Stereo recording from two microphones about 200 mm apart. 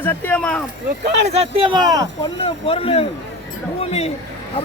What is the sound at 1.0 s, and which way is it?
Speech, 55° right (ahead or behind).